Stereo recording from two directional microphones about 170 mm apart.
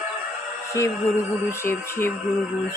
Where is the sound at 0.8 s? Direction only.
15° left (ahead or behind).